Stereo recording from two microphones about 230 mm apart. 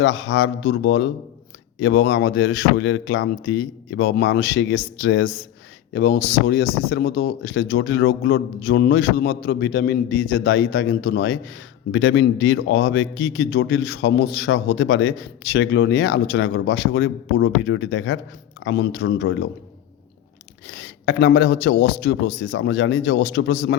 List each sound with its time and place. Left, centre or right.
0.0 s a man's voice: left
20.7 s a man's voice: left